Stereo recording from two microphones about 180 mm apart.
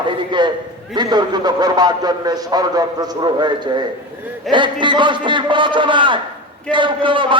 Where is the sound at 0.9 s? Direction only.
25° right (ahead or behind).